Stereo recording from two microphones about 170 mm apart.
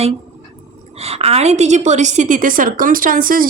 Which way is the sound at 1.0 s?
35° right (ahead or behind).